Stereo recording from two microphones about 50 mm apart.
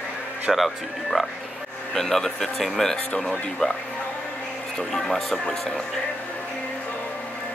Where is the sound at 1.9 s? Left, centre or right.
Centre.